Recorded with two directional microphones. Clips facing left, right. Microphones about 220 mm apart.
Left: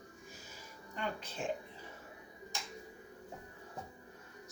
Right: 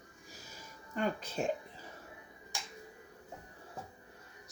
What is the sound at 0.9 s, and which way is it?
Speech, 45° right (ahead or behind).